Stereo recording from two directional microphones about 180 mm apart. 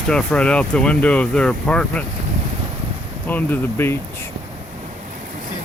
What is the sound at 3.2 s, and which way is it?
Speech, 10° left (ahead or behind).